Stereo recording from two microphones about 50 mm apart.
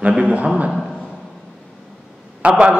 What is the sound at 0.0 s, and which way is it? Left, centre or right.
Speech, right.